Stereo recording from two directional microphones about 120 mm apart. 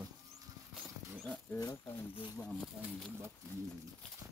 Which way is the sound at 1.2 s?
5° left (ahead or behind).